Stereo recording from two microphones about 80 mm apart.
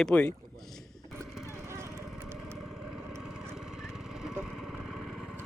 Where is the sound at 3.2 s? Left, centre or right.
Centre.